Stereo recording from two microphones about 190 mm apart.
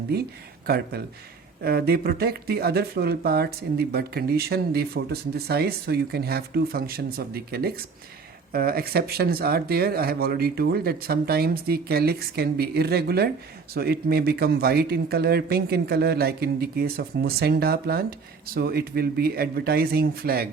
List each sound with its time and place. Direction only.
0.1 s speech: 55° right (ahead or behind)
1.6 s speech: 55° right (ahead or behind)